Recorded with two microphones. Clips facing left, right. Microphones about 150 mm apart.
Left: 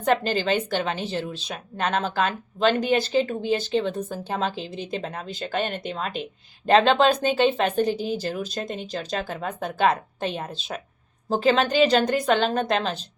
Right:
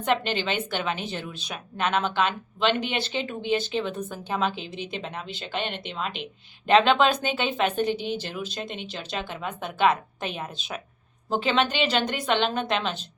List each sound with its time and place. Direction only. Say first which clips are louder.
0.2 s speech: left 4 dB; 40° left (ahead or behind)